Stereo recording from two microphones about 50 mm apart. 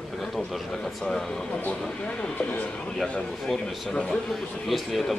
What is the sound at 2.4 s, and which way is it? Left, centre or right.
Speech, left.